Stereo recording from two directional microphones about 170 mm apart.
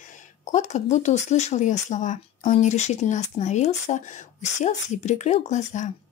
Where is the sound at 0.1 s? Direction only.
45° left (ahead or behind).